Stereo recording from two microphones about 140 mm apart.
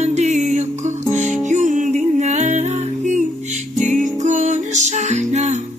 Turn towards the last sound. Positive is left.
turn(degrees=-55)  # may be behind; listen again after turning